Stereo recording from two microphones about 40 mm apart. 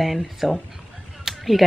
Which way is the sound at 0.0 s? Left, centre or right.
Centre.